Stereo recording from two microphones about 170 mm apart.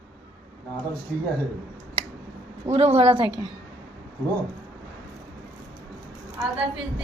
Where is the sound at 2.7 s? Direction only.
35° right (ahead or behind).